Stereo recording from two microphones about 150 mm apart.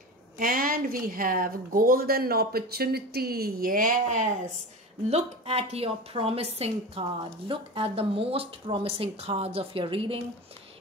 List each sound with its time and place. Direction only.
0.4 s speech: 70° right (ahead or behind)
5.1 s a woman's voice: 45° right (ahead or behind)